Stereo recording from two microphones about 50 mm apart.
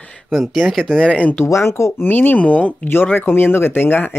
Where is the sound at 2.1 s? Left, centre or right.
Left.